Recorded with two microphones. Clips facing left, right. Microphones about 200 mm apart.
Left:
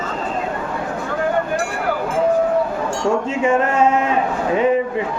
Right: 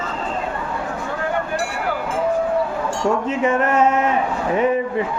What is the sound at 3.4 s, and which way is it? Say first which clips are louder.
Music: left 1 dB; 30° left (ahead or behind).